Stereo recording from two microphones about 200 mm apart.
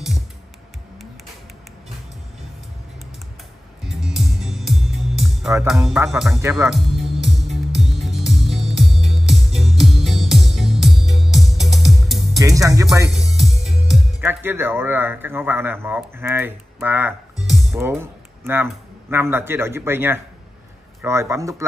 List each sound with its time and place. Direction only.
3.8 s music: centre (ahead or behind)
5.7 s speech: centre (ahead or behind)
6.7 s music: centre (ahead or behind)
12.4 s speech: 15° right (ahead or behind)
13.1 s speech: centre (ahead or behind)